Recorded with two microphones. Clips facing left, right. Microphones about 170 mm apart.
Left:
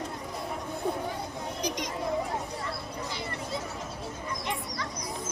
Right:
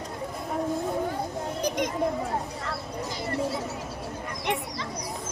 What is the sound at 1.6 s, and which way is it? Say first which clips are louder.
Speech: right 6 dB; 55° right (ahead or behind).